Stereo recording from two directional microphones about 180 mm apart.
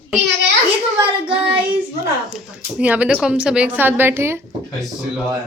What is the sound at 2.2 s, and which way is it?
Speech, 5° right (ahead or behind).